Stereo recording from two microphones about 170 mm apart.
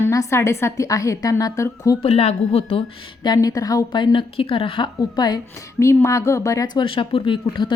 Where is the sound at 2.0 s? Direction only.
35° left (ahead or behind).